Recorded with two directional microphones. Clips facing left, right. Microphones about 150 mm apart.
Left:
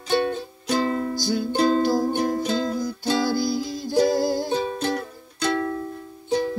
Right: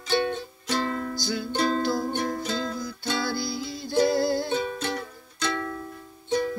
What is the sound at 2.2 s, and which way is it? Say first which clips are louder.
Music: left 6 dB; 30° left (ahead or behind).